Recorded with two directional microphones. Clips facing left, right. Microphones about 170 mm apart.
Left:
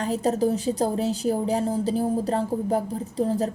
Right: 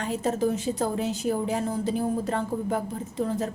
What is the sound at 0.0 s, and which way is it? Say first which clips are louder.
A woman's voice: left 3 dB; 35° left (ahead or behind).